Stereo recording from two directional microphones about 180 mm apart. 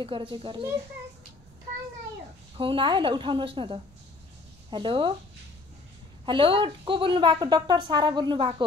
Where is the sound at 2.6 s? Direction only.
30° right (ahead or behind).